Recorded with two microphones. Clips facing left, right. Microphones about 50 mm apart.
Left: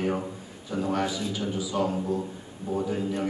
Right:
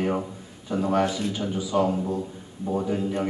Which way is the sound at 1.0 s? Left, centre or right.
Right.